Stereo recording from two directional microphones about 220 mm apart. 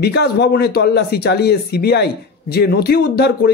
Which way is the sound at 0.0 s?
50° left (ahead or behind).